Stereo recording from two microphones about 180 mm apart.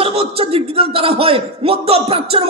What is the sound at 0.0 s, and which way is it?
Speech, 30° right (ahead or behind).